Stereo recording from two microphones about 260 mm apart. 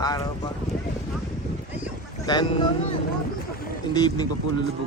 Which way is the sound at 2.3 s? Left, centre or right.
Centre.